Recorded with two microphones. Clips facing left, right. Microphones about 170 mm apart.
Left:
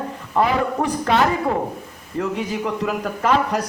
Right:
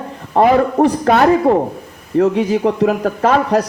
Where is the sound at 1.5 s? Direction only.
35° right (ahead or behind).